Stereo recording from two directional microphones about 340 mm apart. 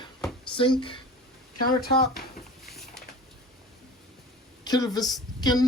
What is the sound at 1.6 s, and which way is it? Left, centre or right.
Speech, left.